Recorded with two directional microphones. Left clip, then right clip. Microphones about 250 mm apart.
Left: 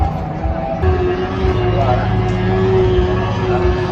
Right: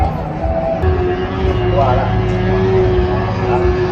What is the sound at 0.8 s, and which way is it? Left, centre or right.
Vehicle, centre.